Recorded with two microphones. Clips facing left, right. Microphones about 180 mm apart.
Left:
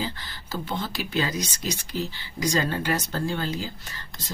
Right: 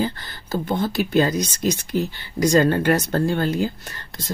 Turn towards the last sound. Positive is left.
turn(degrees=-55)  # may be behind; listen again after turning